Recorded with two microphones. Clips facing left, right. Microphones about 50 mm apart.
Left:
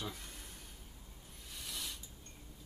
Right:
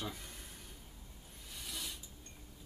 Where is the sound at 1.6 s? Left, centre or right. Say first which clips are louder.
Even; centre.